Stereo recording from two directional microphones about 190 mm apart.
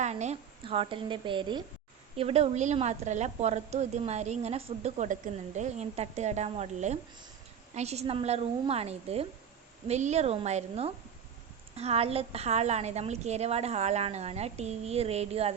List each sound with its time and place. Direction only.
0.0 s a woman's voice: 35° right (ahead or behind)